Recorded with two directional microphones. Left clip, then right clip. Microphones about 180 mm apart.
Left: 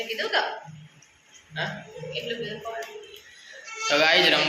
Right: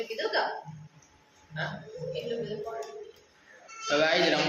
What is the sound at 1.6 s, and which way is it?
Speech, 50° left (ahead or behind).